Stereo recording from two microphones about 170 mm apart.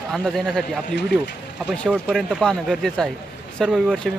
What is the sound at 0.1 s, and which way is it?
Speech, centre (ahead or behind).